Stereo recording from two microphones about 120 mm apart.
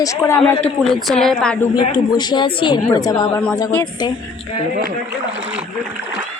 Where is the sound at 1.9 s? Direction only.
40° left (ahead or behind).